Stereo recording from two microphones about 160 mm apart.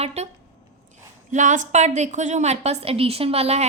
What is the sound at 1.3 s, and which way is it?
A woman's voice, 50° right (ahead or behind).